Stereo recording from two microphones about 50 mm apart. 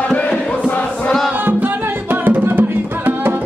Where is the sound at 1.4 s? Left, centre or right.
Right.